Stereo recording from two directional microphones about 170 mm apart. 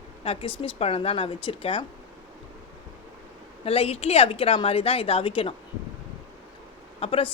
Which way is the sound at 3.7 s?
35° left (ahead or behind).